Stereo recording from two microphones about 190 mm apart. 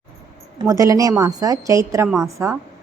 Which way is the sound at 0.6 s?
20° right (ahead or behind).